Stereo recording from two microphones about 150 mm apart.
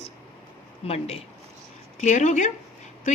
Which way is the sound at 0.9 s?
45° left (ahead or behind).